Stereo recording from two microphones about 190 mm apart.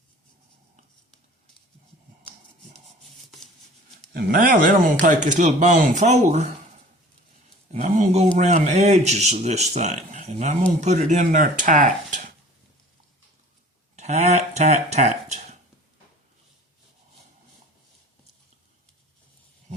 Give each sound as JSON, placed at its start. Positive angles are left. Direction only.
{"t": 4.1, "sound": "speech", "side_deg": -50}
{"t": 7.7, "sound": "a sound", "side_deg": -40}
{"t": 8.4, "sound": "speech", "side_deg": -40}
{"t": 13.9, "sound": "speech", "side_deg": -35}